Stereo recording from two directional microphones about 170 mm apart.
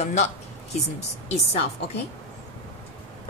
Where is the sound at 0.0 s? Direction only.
45° left (ahead or behind).